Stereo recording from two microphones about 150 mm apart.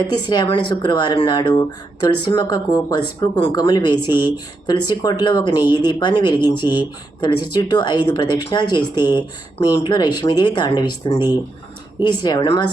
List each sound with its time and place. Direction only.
0.0 s speech: 30° left (ahead or behind)